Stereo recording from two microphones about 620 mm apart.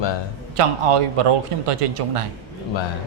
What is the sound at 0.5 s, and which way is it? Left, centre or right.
Speech, right.